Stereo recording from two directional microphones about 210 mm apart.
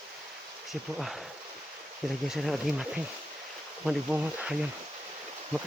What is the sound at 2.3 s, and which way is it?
Speech, centre (ahead or behind).